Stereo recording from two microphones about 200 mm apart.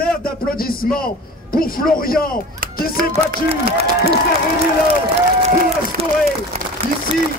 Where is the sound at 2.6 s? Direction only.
45° right (ahead or behind).